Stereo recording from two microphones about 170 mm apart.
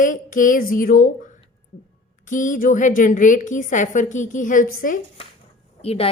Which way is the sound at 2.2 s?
50° left (ahead or behind).